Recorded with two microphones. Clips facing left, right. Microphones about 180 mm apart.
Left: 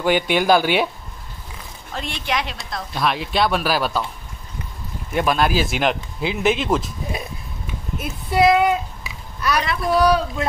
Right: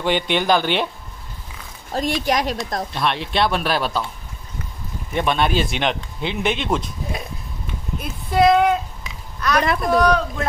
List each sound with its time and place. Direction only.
0.0 s speech: 5° left (ahead or behind)
1.9 s a woman's voice: 40° right (ahead or behind)
2.9 s speech: centre (ahead or behind)
5.1 s speech: 5° left (ahead or behind)
8.0 s a sound: 5° left (ahead or behind)
9.9 s speech: 5° left (ahead or behind)